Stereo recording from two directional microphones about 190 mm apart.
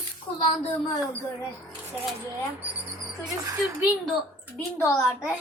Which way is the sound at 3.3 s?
15° right (ahead or behind).